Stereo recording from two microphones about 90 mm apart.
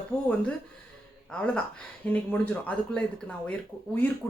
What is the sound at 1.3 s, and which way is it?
Speech, 10° left (ahead or behind).